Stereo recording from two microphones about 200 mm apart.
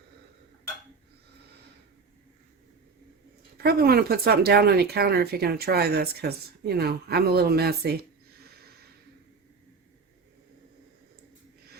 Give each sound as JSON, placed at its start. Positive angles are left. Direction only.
{"t": 3.6, "sound": "speech", "side_deg": -50}